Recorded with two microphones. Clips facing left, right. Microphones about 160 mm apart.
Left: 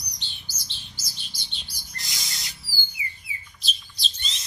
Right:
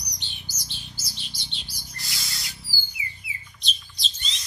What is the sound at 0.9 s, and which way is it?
Bird, centre (ahead or behind).